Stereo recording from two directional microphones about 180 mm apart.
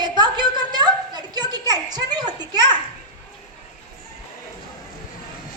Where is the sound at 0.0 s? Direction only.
25° right (ahead or behind).